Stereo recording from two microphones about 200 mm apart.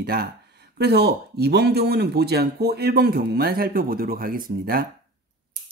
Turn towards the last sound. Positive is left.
turn(degrees=-45)  # may be behind; listen again after turning